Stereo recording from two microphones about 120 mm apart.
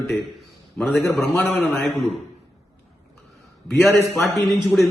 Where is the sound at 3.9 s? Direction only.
20° left (ahead or behind).